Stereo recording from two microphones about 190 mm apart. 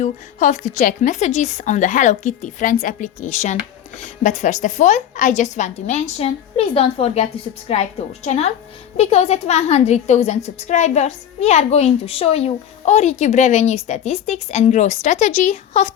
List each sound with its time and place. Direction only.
0.0 s speech: 40° left (ahead or behind)